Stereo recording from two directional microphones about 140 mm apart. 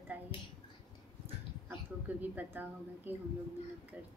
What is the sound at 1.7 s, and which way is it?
A woman's voice, 10° right (ahead or behind).